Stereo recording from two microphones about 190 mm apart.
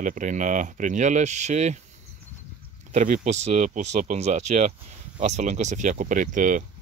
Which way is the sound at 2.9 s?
40° right (ahead or behind).